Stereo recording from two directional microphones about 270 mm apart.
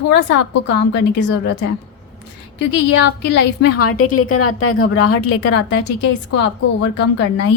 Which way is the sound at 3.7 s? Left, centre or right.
Left.